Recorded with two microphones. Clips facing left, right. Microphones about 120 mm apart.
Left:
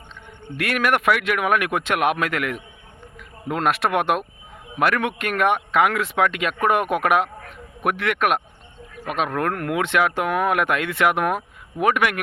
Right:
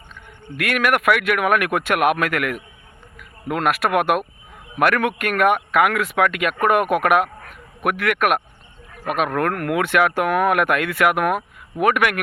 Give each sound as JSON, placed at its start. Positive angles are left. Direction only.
{"t": 0.4, "sound": "speech", "side_deg": 30}